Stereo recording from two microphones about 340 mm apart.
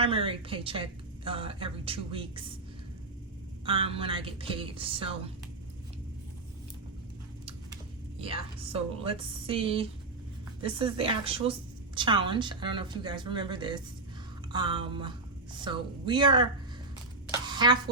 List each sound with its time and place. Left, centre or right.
0.0 s a woman's voice: centre
3.7 s a woman's voice: centre
8.2 s a woman's voice: centre
17.3 s a sound: centre